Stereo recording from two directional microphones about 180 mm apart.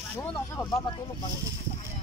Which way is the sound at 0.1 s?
15° left (ahead or behind).